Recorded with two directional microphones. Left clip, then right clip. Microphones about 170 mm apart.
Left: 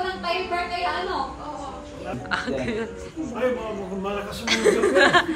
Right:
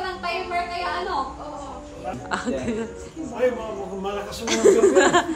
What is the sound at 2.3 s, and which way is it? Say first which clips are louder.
Speech: left 1 dB; 20° right (ahead or behind).